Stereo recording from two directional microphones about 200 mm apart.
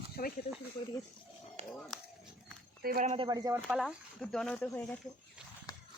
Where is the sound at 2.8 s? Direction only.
45° right (ahead or behind).